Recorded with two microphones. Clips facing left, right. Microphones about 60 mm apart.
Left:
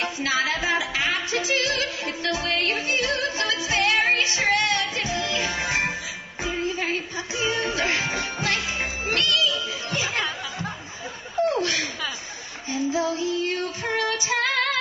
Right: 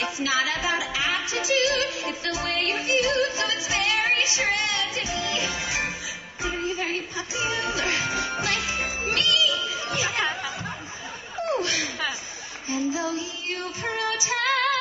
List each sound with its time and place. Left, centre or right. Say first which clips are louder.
0.0 s music: left 1 dB; left
10.0 s music: right 2 dB; right
11.6 s chuckle: left 2 dB; left
12.6 s female singing: left 2 dB; left